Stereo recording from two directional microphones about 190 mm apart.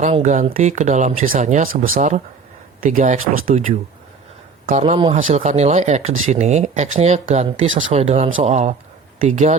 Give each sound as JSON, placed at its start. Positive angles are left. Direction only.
{"t": 0.0, "sound": "speech", "side_deg": -40}
{"t": 4.6, "sound": "speech", "side_deg": -35}